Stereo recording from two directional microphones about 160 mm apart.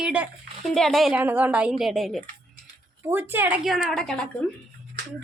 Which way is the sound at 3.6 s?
Centre (ahead or behind).